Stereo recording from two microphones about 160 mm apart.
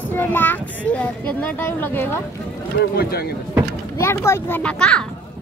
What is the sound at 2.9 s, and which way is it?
Speech, 75° left (ahead or behind).